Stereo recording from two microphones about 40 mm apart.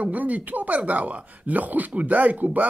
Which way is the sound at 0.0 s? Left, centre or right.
Right.